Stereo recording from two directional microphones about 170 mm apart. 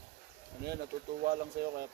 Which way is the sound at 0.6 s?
70° right (ahead or behind).